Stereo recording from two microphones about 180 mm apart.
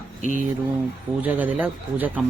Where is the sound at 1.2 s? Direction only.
10° right (ahead or behind).